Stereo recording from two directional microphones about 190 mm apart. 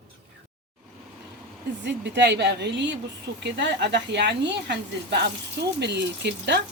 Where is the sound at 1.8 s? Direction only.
65° right (ahead or behind).